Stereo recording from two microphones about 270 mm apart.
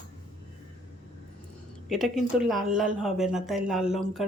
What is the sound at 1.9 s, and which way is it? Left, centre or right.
Speech, centre.